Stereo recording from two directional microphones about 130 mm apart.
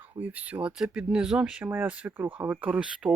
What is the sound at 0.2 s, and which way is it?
Speech, 10° right (ahead or behind).